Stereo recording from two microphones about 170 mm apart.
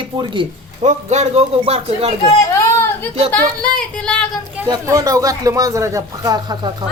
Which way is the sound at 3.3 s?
5° left (ahead or behind).